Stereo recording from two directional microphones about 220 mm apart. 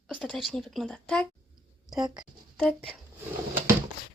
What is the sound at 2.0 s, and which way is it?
Speech, 20° right (ahead or behind).